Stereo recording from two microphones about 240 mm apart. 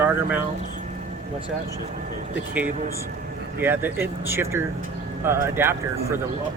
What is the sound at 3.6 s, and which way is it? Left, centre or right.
Speech, centre.